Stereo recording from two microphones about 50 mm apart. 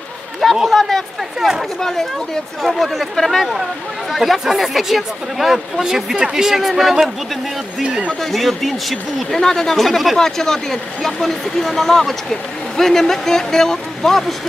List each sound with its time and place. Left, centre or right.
0.7 s speech: centre
7.8 s speech: right
8.2 s speech: centre